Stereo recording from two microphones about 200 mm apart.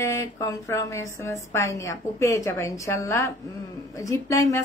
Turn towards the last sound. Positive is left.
turn(degrees=15)  # may be behind; listen again after turning